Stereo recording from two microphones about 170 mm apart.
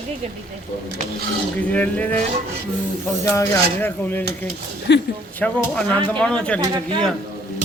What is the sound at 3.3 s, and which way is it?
Speech, 15° left (ahead or behind).